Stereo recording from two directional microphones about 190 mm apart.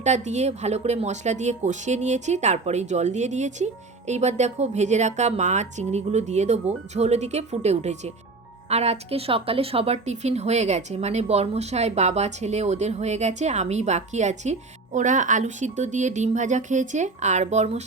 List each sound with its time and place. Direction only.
0.0 s a woman's voice: 40° right (ahead or behind)